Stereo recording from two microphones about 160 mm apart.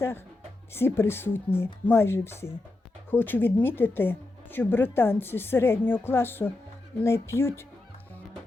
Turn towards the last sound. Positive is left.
turn(degrees=15)  # may be behind; listen again after turning